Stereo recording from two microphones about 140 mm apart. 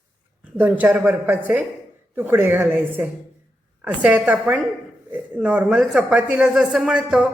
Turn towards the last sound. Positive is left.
turn(degrees=-10)  # may be behind; listen again after turning